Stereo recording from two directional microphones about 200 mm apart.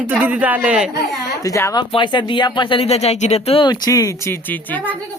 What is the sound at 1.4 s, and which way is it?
Speech, 15° left (ahead or behind).